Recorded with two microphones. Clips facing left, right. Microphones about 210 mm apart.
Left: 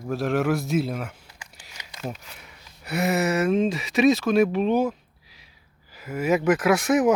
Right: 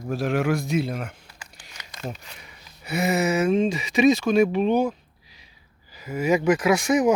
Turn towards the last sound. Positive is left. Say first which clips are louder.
# even
turn(degrees=0)  # may be behind; listen again after turning